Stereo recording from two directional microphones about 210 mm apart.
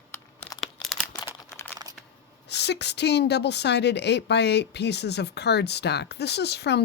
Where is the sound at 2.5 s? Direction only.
55° left (ahead or behind).